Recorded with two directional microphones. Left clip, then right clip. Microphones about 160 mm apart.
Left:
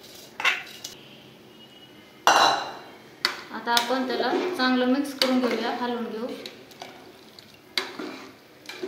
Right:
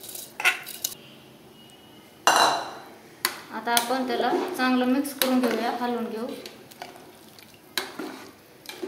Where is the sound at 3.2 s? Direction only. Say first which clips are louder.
Left 1 dB; 20° right (ahead or behind).